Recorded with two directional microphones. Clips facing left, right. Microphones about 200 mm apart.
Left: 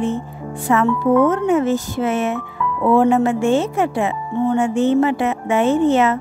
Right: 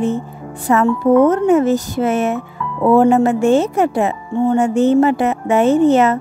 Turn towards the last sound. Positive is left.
turn(degrees=-40)  # may be behind; listen again after turning